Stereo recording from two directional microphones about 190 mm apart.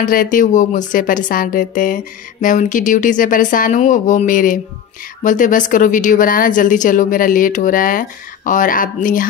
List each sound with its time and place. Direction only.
0.0 s a woman's voice: 45° left (ahead or behind)